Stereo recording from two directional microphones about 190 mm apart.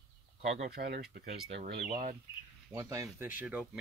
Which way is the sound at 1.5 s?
35° right (ahead or behind).